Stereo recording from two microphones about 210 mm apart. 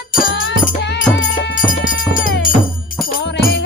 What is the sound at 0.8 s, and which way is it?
Music, 55° left (ahead or behind).